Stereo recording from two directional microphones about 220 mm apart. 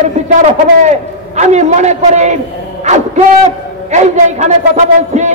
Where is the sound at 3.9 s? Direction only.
30° right (ahead or behind).